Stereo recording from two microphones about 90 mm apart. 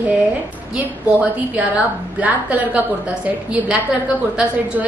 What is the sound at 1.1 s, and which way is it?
A woman's voice, 15° right (ahead or behind).